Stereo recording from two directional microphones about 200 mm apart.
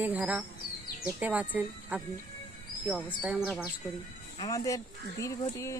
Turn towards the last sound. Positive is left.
turn(degrees=15)  # may be behind; listen again after turning